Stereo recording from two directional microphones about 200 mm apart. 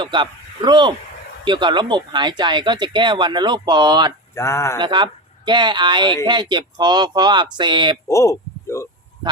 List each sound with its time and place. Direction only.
0.0 s speech: 25° right (ahead or behind)
4.4 s speech: 15° left (ahead or behind)
4.8 s speech: 20° right (ahead or behind)
8.0 s a sound: 15° left (ahead or behind)